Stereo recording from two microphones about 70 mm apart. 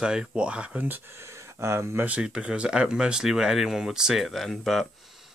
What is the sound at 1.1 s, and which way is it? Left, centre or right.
Speech, right.